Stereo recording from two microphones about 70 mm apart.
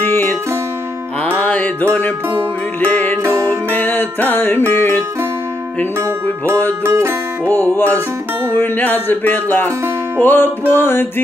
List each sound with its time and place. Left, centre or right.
0.0 s music: left
1.4 s music: left
5.9 s music: right
7.5 s music: left